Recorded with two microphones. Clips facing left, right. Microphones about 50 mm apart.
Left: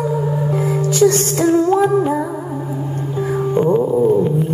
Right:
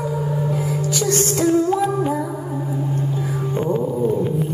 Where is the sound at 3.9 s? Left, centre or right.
Centre.